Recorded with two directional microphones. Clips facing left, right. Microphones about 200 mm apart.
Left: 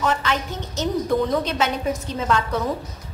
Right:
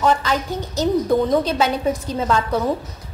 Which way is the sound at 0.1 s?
35° right (ahead or behind).